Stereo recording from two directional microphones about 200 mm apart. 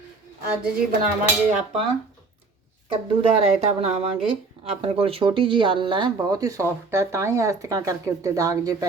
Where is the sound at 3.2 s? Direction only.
30° right (ahead or behind).